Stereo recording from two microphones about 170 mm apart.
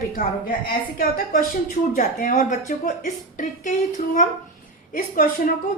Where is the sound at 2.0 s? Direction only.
45° left (ahead or behind).